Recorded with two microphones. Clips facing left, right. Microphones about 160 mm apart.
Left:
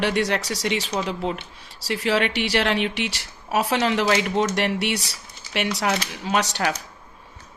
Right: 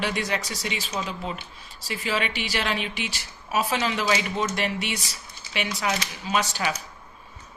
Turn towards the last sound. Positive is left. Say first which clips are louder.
# left 3 dB
turn(degrees=70)  # may be behind; listen again after turning